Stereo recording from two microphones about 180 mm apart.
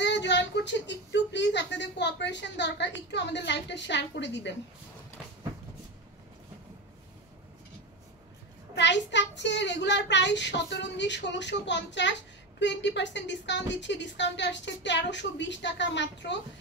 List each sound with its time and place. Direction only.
0.0 s a child's voice: 75° left (ahead or behind)
8.7 s a child's voice: 75° left (ahead or behind)